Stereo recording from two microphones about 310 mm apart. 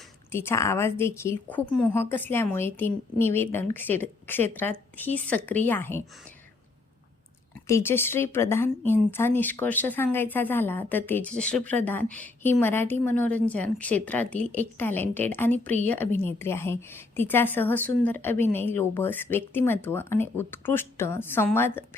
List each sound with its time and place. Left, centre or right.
0.3 s a woman's voice: centre
7.7 s a woman's voice: centre